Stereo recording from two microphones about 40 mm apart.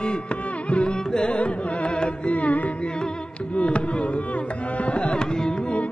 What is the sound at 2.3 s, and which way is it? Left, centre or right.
Carnatic music, left.